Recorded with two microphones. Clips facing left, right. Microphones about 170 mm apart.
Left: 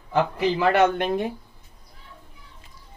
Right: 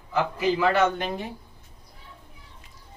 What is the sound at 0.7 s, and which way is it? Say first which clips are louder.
Speech: left 3 dB; 60° left (ahead or behind).